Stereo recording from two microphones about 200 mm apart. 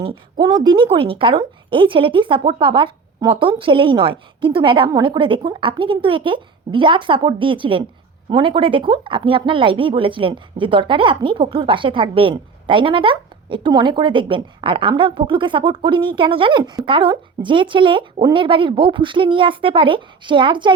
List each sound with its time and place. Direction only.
0.0 s speech: 25° right (ahead or behind)